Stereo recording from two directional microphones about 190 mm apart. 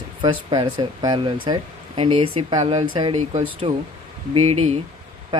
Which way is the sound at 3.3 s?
35° right (ahead or behind).